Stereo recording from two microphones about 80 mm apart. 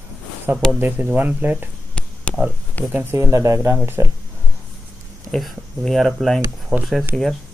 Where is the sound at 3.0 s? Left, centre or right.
Right.